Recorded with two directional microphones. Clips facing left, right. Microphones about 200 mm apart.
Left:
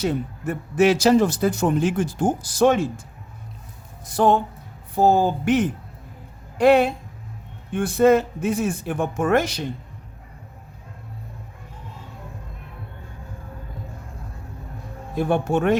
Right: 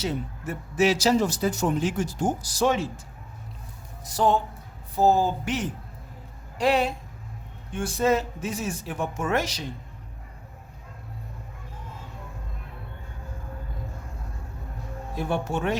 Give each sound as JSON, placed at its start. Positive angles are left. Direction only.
{"t": 0.0, "sound": "speech", "side_deg": 55}
{"t": 4.0, "sound": "speech", "side_deg": 55}
{"t": 15.1, "sound": "speech", "side_deg": 55}